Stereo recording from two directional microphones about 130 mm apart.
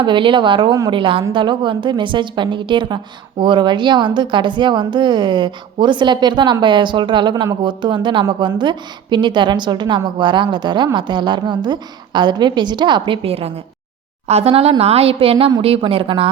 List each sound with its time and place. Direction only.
0.0 s a woman's voice: 40° right (ahead or behind)